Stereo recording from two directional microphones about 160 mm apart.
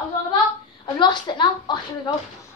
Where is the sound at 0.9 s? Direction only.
25° left (ahead or behind).